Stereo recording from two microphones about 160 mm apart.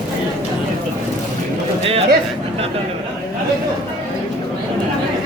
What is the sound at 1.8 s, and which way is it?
Speech, 40° right (ahead or behind).